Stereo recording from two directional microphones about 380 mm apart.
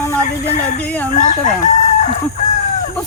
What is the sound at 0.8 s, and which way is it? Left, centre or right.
Speech, centre.